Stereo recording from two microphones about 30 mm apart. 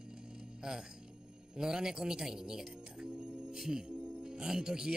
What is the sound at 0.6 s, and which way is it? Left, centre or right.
A man's voice, centre.